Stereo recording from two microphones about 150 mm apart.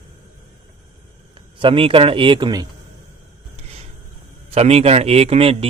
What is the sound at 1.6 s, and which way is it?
Speech, 35° right (ahead or behind).